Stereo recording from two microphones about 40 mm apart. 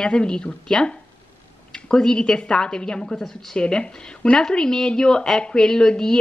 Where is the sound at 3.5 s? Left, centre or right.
Left.